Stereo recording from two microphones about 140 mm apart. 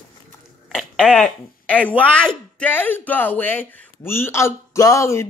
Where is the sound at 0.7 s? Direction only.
Centre (ahead or behind).